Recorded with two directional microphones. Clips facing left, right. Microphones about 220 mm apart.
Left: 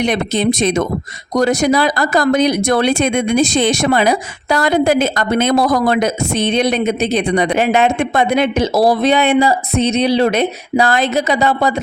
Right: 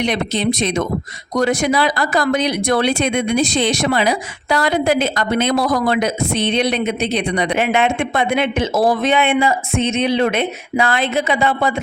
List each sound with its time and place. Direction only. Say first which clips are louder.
0.0 s speech: left 3 dB; 50° left (ahead or behind)